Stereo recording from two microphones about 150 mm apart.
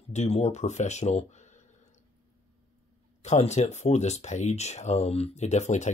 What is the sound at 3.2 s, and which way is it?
Speech, 50° left (ahead or behind).